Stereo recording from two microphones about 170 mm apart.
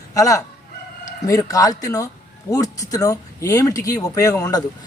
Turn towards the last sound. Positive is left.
turn(degrees=20)  # may be behind; listen again after turning